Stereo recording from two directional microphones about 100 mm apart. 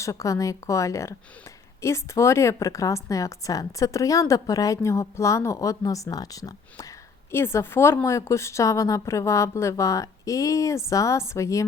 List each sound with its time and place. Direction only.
0.0 s speech: 30° left (ahead or behind)